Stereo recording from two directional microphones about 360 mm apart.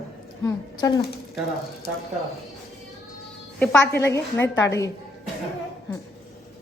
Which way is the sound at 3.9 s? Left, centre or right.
Centre.